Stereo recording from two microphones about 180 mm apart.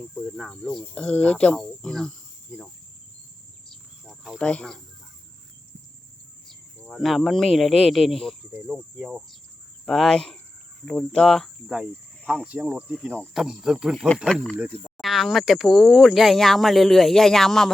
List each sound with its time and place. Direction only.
0.0 s speech: 5° left (ahead or behind)
2.5 s cricket: centre (ahead or behind)
3.7 s insect: centre (ahead or behind)
6.5 s speech: 5° left (ahead or behind)
14.5 s speech: 5° right (ahead or behind)